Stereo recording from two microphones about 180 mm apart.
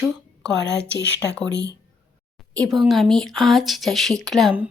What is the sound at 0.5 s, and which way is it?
A woman's voice, 80° left.